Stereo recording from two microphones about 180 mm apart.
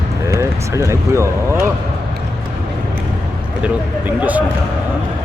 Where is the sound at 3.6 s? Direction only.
10° right (ahead or behind).